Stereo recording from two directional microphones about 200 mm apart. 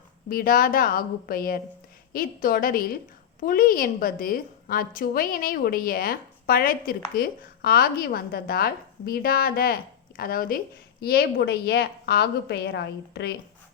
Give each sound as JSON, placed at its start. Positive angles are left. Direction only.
{"t": 0.3, "sound": "a woman's voice", "side_deg": 45}